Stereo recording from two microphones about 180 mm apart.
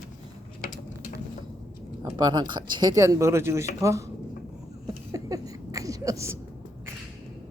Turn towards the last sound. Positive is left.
turn(degrees=-15)  # may be behind; listen again after turning